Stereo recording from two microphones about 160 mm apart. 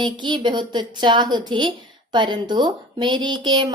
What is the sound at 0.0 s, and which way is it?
Speech, 30° right (ahead or behind).